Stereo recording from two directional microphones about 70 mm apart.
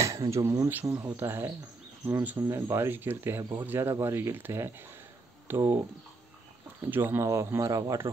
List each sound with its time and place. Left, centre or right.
0.3 s speech: right
0.7 s speech: right
2.0 s speech: right
2.5 s speech: right
6.9 s speech: right
7.2 s speech: right